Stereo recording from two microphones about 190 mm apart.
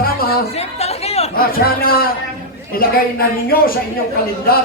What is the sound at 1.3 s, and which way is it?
Speech, 50° left (ahead or behind).